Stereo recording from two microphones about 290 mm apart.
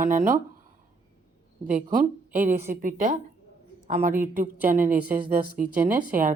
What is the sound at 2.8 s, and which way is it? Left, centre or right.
A woman's voice, right.